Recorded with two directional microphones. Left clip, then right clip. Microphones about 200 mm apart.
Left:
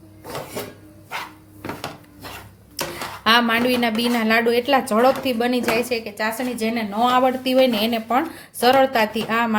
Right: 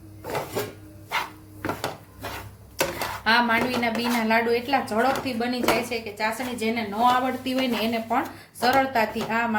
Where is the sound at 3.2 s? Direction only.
50° left (ahead or behind).